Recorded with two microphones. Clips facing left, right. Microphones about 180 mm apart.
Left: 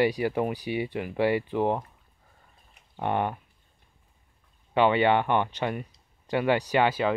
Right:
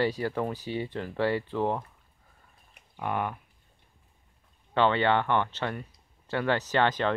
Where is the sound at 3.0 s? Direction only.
25° left (ahead or behind).